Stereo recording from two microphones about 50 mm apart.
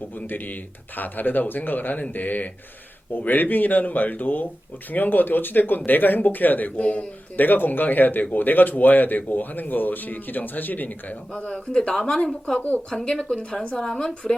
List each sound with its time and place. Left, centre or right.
0.2 s speech: left; by 12.5 s centre
12.5 s speech: left
12.9 s a woman's voice: centre